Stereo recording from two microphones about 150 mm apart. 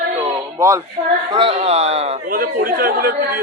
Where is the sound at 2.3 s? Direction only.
75° right (ahead or behind).